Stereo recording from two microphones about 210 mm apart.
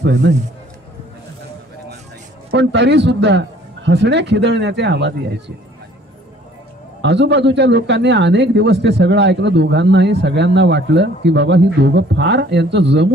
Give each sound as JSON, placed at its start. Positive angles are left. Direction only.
{"t": 0.0, "sound": "a man's voice", "side_deg": -60}
{"t": 2.5, "sound": "a man's voice", "side_deg": -55}
{"t": 7.0, "sound": "a man's voice", "side_deg": -55}